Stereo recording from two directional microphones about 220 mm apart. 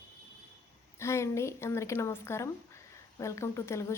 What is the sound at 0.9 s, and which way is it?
A woman's voice, 10° left (ahead or behind).